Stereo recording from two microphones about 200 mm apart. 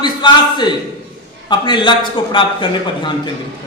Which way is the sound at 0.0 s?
20° left (ahead or behind).